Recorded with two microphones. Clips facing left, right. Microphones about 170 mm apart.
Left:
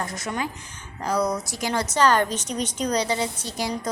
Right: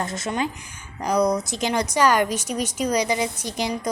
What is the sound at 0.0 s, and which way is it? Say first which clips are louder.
A woman's voice: right 3 dB; 25° right (ahead or behind).